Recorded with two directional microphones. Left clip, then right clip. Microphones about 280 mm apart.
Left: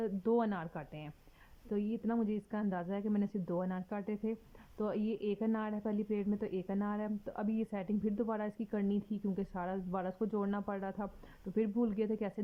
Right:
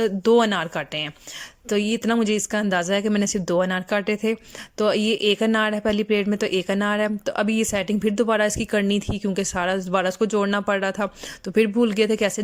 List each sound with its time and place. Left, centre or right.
0.3 s speech: centre